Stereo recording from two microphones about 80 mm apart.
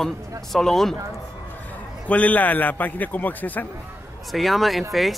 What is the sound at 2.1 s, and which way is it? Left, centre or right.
A man's voice, centre.